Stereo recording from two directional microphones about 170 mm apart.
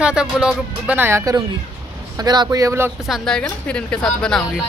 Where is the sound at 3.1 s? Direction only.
5° left (ahead or behind).